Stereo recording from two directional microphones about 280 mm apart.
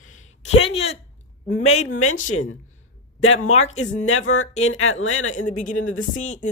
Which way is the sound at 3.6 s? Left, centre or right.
Left.